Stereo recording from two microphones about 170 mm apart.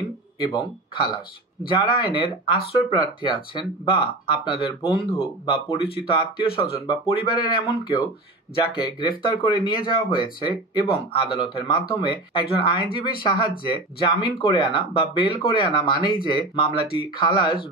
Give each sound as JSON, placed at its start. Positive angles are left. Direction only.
{"t": 0.5, "sound": "speech", "side_deg": 25}